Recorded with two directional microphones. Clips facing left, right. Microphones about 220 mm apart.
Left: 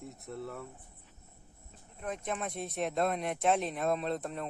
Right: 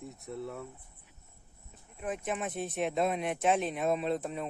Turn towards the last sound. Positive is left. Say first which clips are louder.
# right 2 dB
turn(degrees=0)  # may be behind; listen again after turning